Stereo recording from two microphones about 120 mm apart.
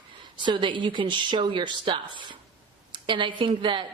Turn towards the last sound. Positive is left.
turn(degrees=-45)  # may be behind; listen again after turning